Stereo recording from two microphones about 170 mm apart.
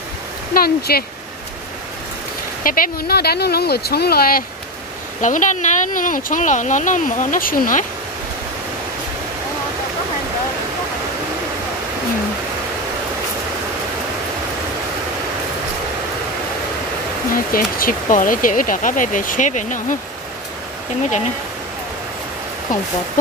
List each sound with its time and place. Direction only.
0.6 s speech: 65° left (ahead or behind)
2.6 s speech: 55° left (ahead or behind)
5.2 s speech: 50° left (ahead or behind)
17.3 s speech: 55° left (ahead or behind)